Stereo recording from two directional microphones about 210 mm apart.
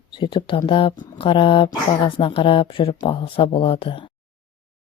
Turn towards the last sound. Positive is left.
turn(degrees=25)  # may be behind; listen again after turning